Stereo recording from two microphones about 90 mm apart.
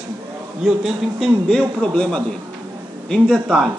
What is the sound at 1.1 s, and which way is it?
A man's voice, centre (ahead or behind).